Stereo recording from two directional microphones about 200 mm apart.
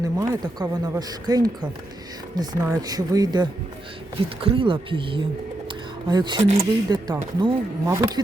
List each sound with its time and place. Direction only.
0.0 s speech: 20° right (ahead or behind)
5.6 s a sound: 20° right (ahead or behind)
6.4 s speech: 30° right (ahead or behind)